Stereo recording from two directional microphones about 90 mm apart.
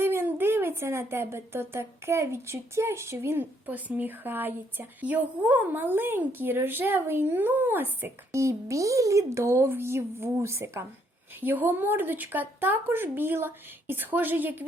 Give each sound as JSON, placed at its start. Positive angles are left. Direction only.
{"t": 0.0, "sound": "speech", "side_deg": -25}